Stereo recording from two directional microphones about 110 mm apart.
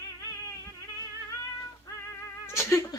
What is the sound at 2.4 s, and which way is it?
Cat, 25° left (ahead or behind).